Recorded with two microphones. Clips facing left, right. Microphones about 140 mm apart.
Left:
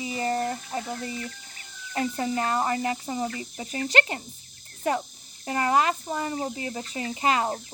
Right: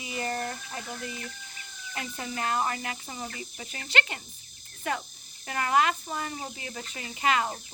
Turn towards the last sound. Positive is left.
turn(degrees=35)  # may be behind; listen again after turning